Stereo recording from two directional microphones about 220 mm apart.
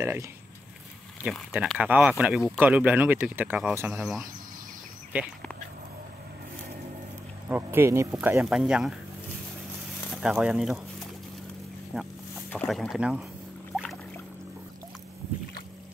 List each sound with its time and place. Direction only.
0.0 s speech: 10° right (ahead or behind)
7.4 s speech: 10° right (ahead or behind)
10.1 s speech: 5° right (ahead or behind)
11.9 s speech: centre (ahead or behind)
13.7 s boat: 5° left (ahead or behind)